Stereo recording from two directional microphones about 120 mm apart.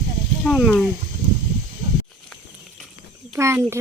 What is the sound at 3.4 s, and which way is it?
Speech, 25° right (ahead or behind).